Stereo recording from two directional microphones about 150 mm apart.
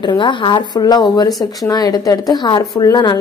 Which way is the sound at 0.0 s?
30° left (ahead or behind).